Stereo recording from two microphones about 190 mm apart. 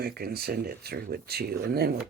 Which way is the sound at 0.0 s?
55° right (ahead or behind).